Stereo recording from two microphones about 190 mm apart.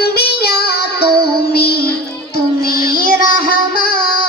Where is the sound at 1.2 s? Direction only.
55° left (ahead or behind).